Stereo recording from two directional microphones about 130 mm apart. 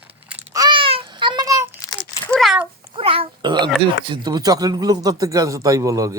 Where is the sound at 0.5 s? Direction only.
35° right (ahead or behind).